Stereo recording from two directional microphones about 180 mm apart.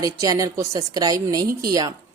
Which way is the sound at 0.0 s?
20° right (ahead or behind).